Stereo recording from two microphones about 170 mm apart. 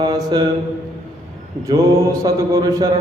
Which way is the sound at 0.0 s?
25° right (ahead or behind).